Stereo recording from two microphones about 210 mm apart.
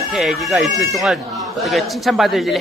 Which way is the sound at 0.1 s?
Centre (ahead or behind).